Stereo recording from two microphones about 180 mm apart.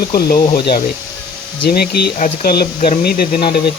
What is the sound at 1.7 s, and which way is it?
Speech, 60° left (ahead or behind).